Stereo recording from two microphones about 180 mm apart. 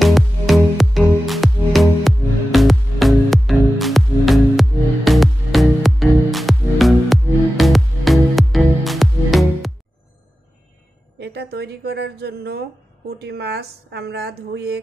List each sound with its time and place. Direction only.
0.0 s music: centre (ahead or behind)
11.1 s a sound: 65° right (ahead or behind)
13.2 s speech: 65° right (ahead or behind)